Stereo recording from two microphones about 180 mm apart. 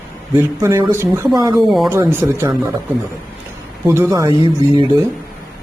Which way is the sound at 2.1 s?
15° right (ahead or behind).